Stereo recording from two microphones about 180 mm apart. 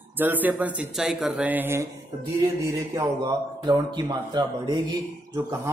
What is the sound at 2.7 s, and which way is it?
Speech, 20° right (ahead or behind).